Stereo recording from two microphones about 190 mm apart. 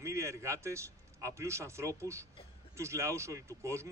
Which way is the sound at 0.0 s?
15° right (ahead or behind).